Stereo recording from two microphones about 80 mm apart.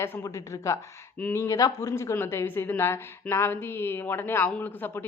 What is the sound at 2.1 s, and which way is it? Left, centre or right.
A woman's voice, left.